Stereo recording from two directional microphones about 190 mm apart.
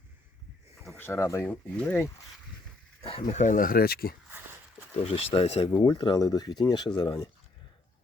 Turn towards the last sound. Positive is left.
turn(degrees=25)  # may be behind; listen again after turning